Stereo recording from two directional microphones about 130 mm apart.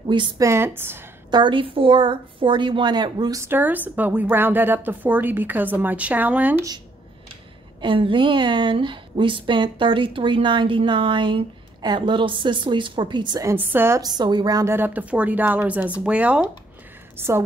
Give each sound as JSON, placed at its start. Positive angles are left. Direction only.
{"t": 0.0, "sound": "a woman's voice", "side_deg": -40}
{"t": 0.4, "sound": "a woman's voice", "side_deg": -20}
{"t": 1.3, "sound": "a woman's voice", "side_deg": -40}
{"t": 3.4, "sound": "speech", "side_deg": -15}
{"t": 7.8, "sound": "a woman's voice", "side_deg": -40}
{"t": 13.4, "sound": "a woman's voice", "side_deg": -20}
{"t": 14.0, "sound": "speech", "side_deg": -35}